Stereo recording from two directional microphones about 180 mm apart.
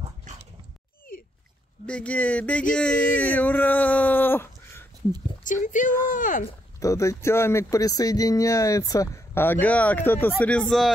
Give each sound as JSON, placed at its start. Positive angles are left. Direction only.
{"t": 1.9, "sound": "speech", "side_deg": 5}
{"t": 5.4, "sound": "speech", "side_deg": 45}
{"t": 6.8, "sound": "speech", "side_deg": 15}
{"t": 10.6, "sound": "speech", "side_deg": 0}